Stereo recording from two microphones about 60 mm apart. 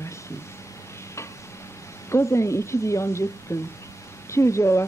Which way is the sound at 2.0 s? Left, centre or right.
Left.